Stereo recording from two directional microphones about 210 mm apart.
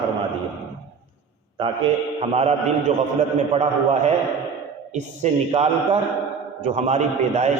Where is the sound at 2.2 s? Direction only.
30° right (ahead or behind).